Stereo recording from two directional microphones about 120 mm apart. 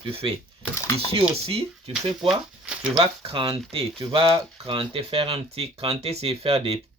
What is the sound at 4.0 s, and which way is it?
Speech, 45° right (ahead or behind).